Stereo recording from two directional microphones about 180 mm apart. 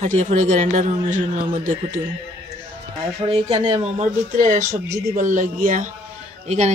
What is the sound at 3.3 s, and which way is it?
Speech, 35° right (ahead or behind).